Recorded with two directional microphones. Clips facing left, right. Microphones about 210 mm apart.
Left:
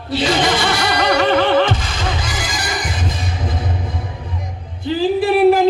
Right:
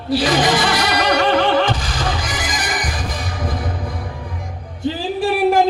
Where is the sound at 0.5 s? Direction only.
25° left (ahead or behind).